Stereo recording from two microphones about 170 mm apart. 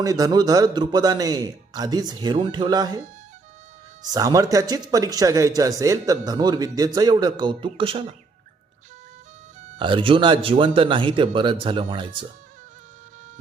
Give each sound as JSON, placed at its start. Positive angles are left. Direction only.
{"t": 0.0, "sound": "speech", "side_deg": -20}
{"t": 4.0, "sound": "speech", "side_deg": -20}
{"t": 9.7, "sound": "speech", "side_deg": -30}